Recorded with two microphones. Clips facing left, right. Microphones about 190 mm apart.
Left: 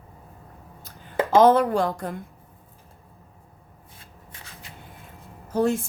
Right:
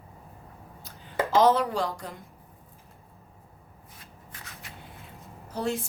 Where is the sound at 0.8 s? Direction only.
50° left (ahead or behind).